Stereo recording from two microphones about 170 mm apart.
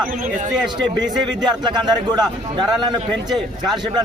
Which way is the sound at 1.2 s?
25° right (ahead or behind).